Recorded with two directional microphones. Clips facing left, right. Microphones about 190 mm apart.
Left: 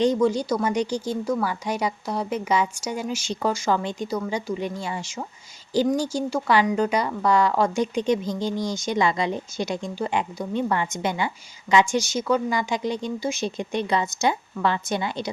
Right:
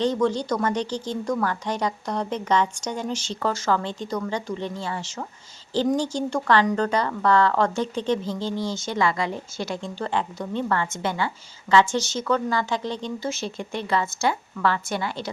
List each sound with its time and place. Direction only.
0.0 s a woman's voice: 10° left (ahead or behind)